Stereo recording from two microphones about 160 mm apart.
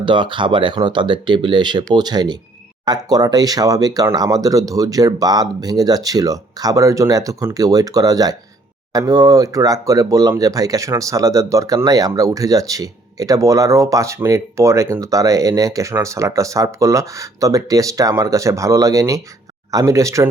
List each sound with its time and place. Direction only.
0.0 s speech: 30° right (ahead or behind)